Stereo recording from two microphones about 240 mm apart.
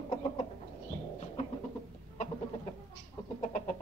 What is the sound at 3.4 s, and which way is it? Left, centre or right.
Chicken, left.